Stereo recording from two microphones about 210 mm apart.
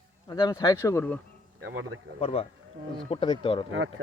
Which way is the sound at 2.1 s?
25° left (ahead or behind).